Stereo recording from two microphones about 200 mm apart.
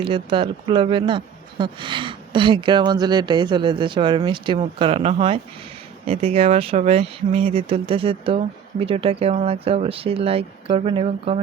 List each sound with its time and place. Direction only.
0.0 s speech: 25° right (ahead or behind)